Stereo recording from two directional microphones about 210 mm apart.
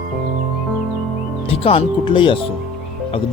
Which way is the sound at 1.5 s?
25° left (ahead or behind).